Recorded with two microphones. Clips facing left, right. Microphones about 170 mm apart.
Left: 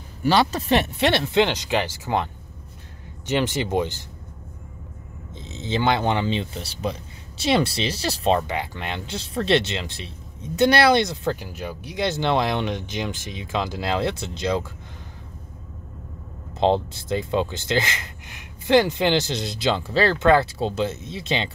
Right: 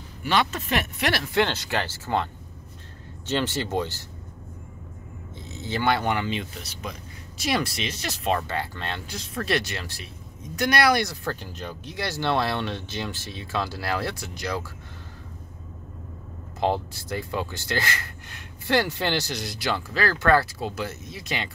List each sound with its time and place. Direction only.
0.2 s speech: 35° left (ahead or behind); by 2.2 s 15° left (ahead or behind)
3.3 s speech: 15° left (ahead or behind)
5.4 s speech: 20° left (ahead or behind)
8.4 s speech: 15° left (ahead or behind)
9.1 s speech: 30° left (ahead or behind)
16.5 s speech: 25° left (ahead or behind)